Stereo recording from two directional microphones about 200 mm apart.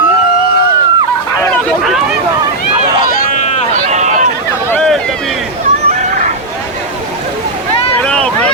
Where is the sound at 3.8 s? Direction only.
35° right (ahead or behind).